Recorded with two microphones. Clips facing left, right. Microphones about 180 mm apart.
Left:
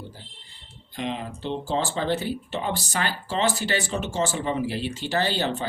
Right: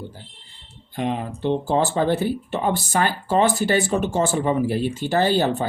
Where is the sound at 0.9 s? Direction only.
55° right (ahead or behind).